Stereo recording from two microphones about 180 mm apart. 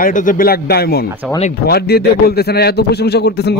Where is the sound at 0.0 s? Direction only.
50° left (ahead or behind).